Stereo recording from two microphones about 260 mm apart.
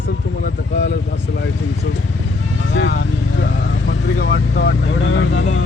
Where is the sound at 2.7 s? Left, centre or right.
Left.